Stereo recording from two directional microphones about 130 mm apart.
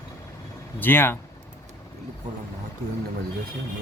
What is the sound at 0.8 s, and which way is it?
Speech, 15° left (ahead or behind).